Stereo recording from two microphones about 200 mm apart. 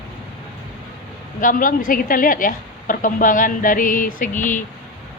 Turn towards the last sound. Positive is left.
turn(degrees=40)  # may be behind; listen again after turning